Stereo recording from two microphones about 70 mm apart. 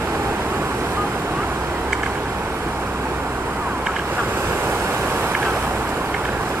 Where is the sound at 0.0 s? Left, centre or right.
Right.